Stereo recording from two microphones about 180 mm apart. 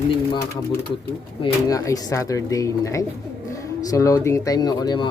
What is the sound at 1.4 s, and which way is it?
Speech, 20° left (ahead or behind).